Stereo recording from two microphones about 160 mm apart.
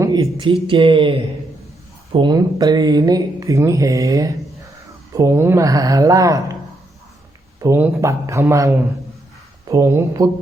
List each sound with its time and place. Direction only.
0.0 s speech: 25° right (ahead or behind)
7.6 s speech: 15° right (ahead or behind)